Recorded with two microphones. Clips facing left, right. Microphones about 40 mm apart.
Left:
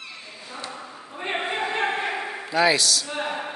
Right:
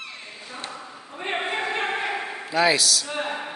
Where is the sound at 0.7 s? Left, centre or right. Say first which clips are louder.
Even; centre.